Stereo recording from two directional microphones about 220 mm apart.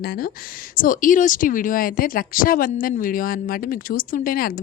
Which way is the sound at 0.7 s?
40° left (ahead or behind).